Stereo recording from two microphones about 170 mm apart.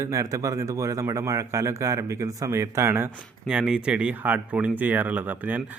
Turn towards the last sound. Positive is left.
turn(degrees=-10)  # may be behind; listen again after turning